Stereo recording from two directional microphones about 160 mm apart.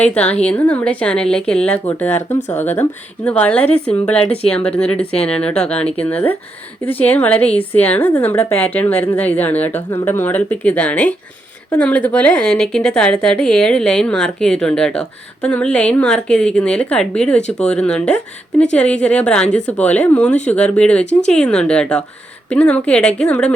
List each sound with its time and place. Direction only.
0.0 s a woman's voice: 5° left (ahead or behind)
21.0 s speech: 45° left (ahead or behind)
21.2 s a woman's voice: 5° left (ahead or behind)